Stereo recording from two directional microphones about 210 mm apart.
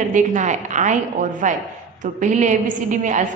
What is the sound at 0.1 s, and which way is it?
A woman's voice, 35° right (ahead or behind).